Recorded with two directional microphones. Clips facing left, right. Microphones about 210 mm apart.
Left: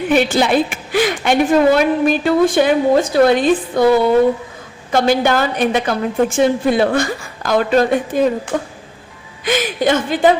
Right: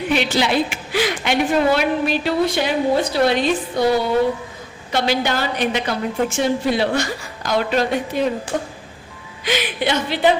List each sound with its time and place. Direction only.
0.1 s a woman's voice: 50° left (ahead or behind)
9.4 s a woman's voice: 50° left (ahead or behind)